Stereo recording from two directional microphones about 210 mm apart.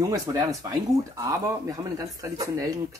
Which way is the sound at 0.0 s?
15° right (ahead or behind).